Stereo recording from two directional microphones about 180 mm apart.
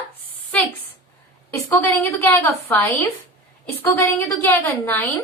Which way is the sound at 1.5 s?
10° left (ahead or behind).